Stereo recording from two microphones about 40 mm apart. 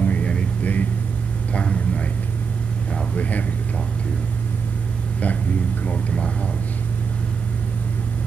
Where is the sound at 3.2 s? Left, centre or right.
Left.